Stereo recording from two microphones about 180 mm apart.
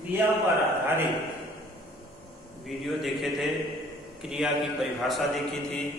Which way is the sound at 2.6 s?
Centre (ahead or behind).